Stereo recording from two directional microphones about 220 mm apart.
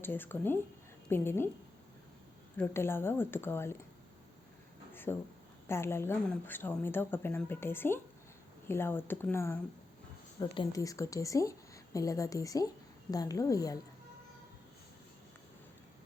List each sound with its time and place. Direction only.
0.0 s a woman's voice: 10° left (ahead or behind)
2.6 s a woman's voice: 10° left (ahead or behind)
5.1 s a woman's voice: 10° left (ahead or behind)